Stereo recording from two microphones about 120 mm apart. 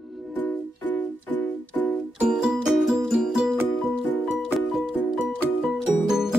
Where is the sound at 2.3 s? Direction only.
5° right (ahead or behind).